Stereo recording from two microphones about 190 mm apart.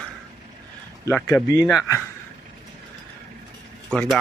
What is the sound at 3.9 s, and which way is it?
Speech, centre (ahead or behind).